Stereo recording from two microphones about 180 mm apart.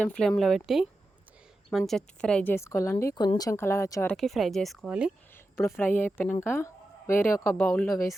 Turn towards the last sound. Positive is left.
turn(degrees=5)  # may be behind; listen again after turning